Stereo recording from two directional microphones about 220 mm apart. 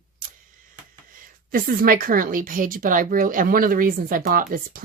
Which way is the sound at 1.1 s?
40° right (ahead or behind).